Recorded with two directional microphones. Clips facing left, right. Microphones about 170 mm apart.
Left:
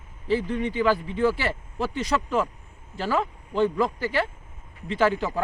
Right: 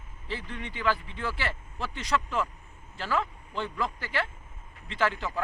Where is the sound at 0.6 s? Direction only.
40° left (ahead or behind).